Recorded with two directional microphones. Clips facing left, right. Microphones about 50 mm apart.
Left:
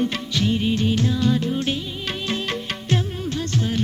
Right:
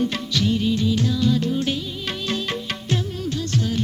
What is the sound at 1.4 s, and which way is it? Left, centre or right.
Music, centre.